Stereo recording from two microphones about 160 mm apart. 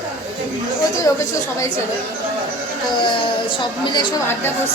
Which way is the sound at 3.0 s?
30° left (ahead or behind).